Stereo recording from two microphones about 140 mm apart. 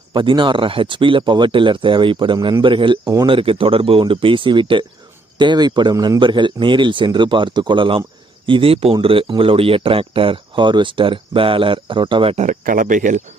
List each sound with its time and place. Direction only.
0.1 s speech: 35° right (ahead or behind)
12.5 s speech: 75° right (ahead or behind)